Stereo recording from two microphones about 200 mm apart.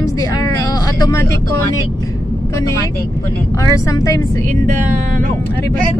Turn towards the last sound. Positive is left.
turn(degrees=-40)  # may be behind; listen again after turning